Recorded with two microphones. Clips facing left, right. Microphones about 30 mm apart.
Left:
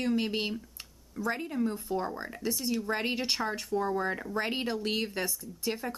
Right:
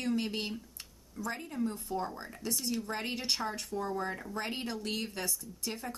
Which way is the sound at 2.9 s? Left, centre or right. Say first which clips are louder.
Left 4 dB; centre.